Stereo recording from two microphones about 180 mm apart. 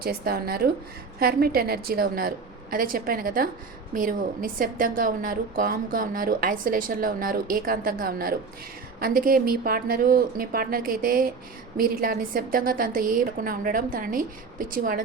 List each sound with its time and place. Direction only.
0.0 s a woman's voice: 55° right (ahead or behind)